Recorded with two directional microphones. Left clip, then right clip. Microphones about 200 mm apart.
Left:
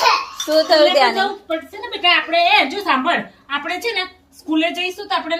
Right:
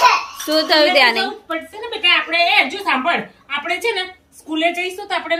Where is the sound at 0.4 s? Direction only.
10° right (ahead or behind).